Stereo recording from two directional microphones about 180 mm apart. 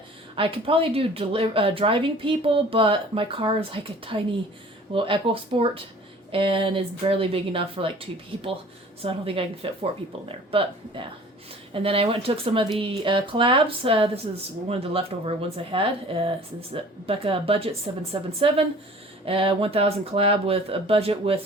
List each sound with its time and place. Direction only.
0.3 s speech: 30° right (ahead or behind)